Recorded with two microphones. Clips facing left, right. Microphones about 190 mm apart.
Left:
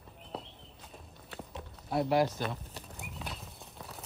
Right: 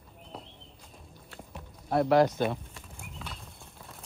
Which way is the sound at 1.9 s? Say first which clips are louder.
Right 5 dB; 55° right (ahead or behind).